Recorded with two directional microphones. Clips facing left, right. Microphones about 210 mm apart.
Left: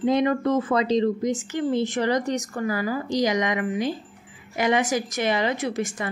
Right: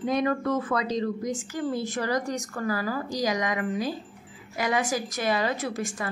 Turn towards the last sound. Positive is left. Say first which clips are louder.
# left 4 dB
turn(degrees=20)  # may be behind; listen again after turning